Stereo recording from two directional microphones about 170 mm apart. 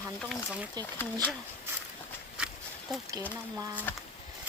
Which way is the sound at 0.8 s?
25° right (ahead or behind).